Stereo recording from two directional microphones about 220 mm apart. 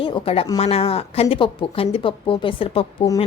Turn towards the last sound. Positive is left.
turn(degrees=20)  # may be behind; listen again after turning